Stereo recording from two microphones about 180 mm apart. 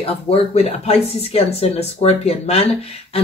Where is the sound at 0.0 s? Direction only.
35° left (ahead or behind).